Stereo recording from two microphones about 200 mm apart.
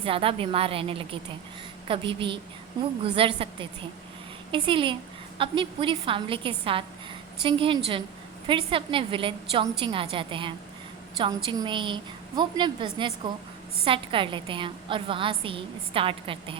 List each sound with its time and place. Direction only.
0.0 s a woman's voice: 25° right (ahead or behind)
11.5 s a woman's voice: 25° right (ahead or behind)